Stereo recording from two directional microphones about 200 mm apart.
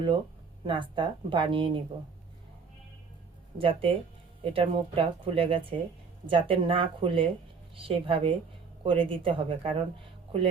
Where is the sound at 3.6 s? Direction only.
25° right (ahead or behind).